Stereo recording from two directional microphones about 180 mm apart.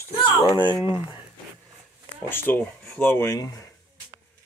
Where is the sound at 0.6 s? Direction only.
20° right (ahead or behind).